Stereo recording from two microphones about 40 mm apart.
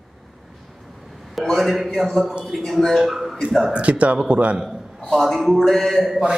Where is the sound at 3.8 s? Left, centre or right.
Right.